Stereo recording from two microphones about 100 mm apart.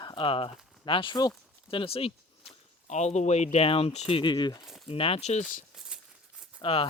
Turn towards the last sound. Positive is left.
turn(degrees=60)  # may be behind; listen again after turning